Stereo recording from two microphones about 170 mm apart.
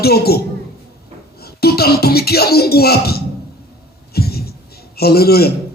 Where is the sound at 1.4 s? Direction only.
65° left (ahead or behind).